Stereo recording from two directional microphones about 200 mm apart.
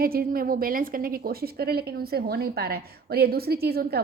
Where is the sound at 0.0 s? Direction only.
50° right (ahead or behind).